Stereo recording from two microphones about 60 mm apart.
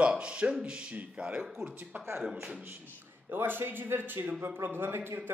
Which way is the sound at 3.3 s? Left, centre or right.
Right.